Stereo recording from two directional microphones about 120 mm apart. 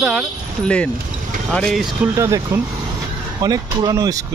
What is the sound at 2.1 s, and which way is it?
Speech, 25° right (ahead or behind).